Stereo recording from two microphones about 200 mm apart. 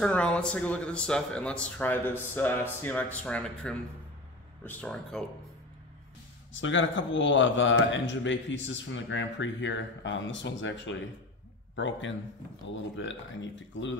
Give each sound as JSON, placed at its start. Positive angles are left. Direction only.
{"t": 0.0, "sound": "speech", "side_deg": 5}
{"t": 6.5, "sound": "a man's voice", "side_deg": 70}